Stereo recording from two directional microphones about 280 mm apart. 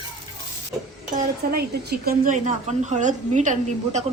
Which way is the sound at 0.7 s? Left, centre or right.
Centre.